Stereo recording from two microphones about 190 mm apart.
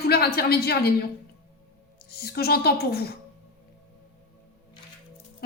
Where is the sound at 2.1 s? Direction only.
55° left (ahead or behind).